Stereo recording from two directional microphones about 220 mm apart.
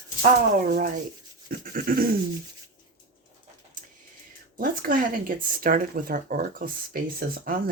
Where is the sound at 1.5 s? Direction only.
40° right (ahead or behind).